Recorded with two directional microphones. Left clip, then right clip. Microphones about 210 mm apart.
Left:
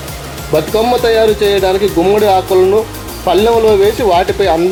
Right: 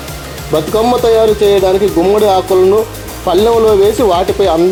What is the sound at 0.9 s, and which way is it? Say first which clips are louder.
Speech: right 2 dB; 5° right (ahead or behind).